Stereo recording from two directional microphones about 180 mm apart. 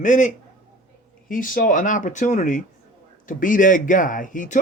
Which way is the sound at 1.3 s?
50° left (ahead or behind).